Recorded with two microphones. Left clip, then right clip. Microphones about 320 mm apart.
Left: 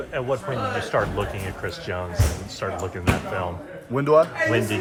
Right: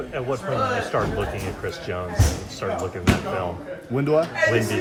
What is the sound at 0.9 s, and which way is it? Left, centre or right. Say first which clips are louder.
Speech: left 3 dB; left.